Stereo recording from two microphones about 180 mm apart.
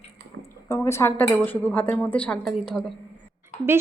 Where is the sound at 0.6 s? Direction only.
15° left (ahead or behind); by 2.9 s centre (ahead or behind).